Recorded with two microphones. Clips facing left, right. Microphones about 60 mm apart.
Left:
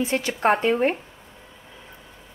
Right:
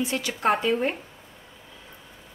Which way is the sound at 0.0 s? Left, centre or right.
Left.